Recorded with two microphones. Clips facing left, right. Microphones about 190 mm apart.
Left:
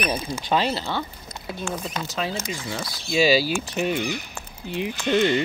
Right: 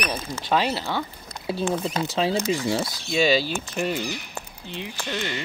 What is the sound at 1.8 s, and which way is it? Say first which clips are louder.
Speech: right 5 dB; 30° right (ahead or behind).